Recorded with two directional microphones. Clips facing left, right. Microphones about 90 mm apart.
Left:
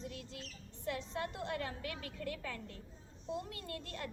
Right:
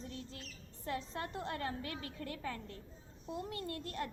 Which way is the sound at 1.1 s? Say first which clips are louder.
Left 1 dB; 30° right (ahead or behind).